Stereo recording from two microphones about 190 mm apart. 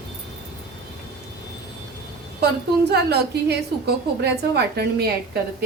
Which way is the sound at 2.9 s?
60° right (ahead or behind).